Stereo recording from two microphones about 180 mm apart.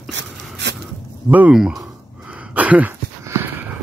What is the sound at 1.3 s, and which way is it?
Speech, 10° right (ahead or behind).